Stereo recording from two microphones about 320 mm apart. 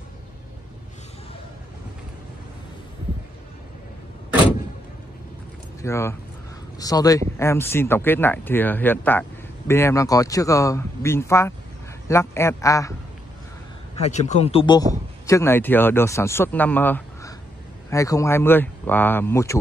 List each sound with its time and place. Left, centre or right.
5.8 s speech: centre
13.9 s a man's voice: centre